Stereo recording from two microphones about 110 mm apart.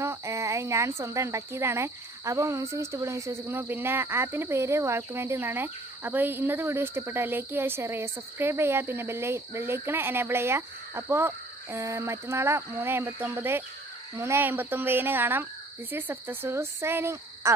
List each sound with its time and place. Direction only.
0.0 s speech: 25° right (ahead or behind)